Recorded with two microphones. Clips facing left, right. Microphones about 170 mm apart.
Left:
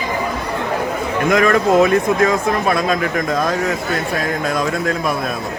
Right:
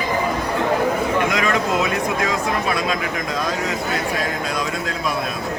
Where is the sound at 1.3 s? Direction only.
50° left (ahead or behind).